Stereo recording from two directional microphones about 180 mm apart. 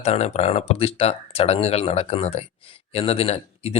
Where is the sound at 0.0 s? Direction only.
35° left (ahead or behind).